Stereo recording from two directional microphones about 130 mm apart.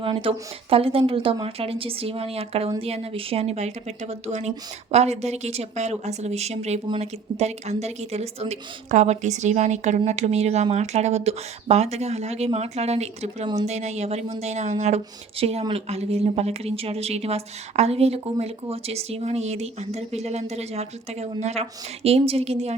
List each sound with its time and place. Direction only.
0.0 s speech: 45° right (ahead or behind)